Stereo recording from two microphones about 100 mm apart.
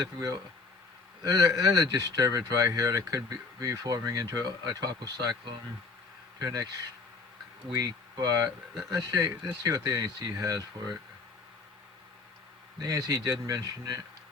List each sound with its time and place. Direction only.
0.0 s speech: 35° right (ahead or behind)
7.8 s speech: 40° right (ahead or behind)
12.8 s speech: 35° right (ahead or behind)